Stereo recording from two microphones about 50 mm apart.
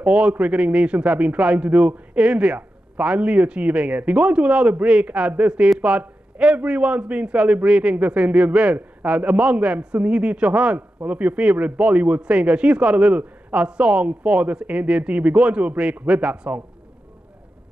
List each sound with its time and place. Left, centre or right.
0.0 s a man's voice: right